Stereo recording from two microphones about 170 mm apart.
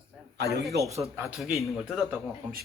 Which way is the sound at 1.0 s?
15° right (ahead or behind).